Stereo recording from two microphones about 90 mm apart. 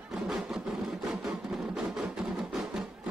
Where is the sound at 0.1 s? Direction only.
5° right (ahead or behind).